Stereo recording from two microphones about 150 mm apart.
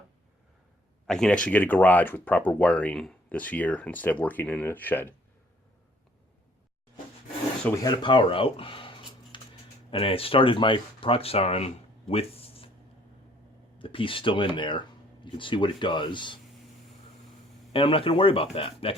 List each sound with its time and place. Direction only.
1.0 s speech: 5° left (ahead or behind)
8.0 s a sound: 35° left (ahead or behind)
9.9 s speech: 40° left (ahead or behind)
13.7 s speech: 35° left (ahead or behind)
17.7 s speech: 35° left (ahead or behind)